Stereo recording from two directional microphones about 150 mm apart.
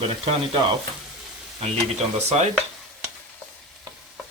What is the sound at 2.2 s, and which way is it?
Speech, 50° right (ahead or behind).